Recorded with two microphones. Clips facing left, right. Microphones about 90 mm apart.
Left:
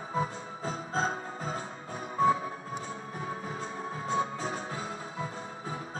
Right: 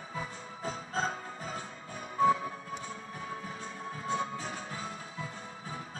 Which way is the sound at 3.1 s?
30° left (ahead or behind).